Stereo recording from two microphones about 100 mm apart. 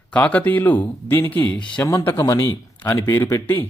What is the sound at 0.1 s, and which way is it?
Speech, 15° left (ahead or behind).